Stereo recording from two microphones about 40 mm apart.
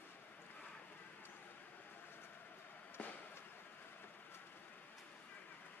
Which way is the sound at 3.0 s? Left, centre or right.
Left.